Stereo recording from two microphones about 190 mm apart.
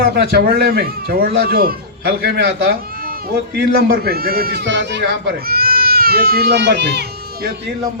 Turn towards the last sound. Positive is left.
turn(degrees=-65)  # may be behind; listen again after turning